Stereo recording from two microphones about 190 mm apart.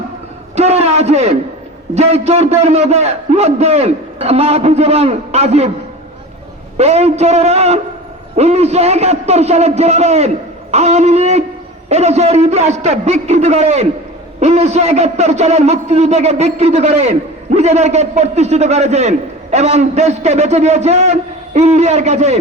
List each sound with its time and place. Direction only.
0.5 s a sound: 35° right (ahead or behind)
2.0 s a man's voice: 35° right (ahead or behind)
6.7 s a man's voice: 35° right (ahead or behind)